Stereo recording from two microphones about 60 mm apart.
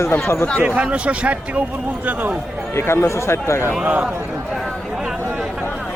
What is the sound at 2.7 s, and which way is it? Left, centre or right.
Speech, left.